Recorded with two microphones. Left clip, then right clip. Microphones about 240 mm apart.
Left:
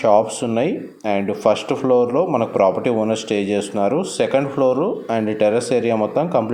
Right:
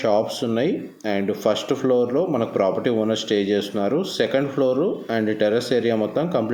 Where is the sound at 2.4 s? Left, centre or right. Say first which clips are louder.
Left 4 dB; left.